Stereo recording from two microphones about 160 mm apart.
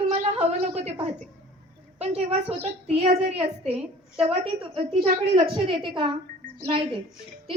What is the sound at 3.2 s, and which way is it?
A woman's voice, 40° right (ahead or behind).